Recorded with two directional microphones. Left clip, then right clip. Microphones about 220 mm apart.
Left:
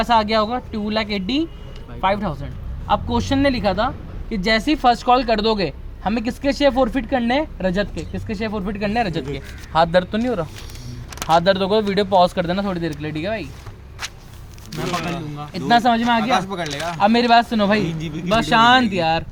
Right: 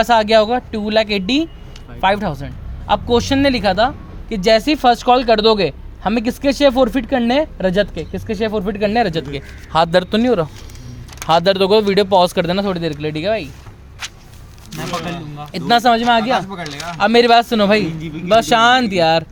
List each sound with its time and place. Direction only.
0.0 s a man's voice: 50° right (ahead or behind)
15.5 s a man's voice: 50° right (ahead or behind)
16.5 s speech: 35° left (ahead or behind)
17.0 s a man's voice: 50° right (ahead or behind)
18.0 s speech: 40° left (ahead or behind)
18.3 s a man's voice: 50° right (ahead or behind)